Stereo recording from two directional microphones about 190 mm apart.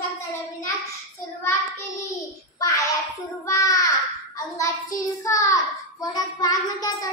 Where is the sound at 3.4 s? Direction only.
15° left (ahead or behind).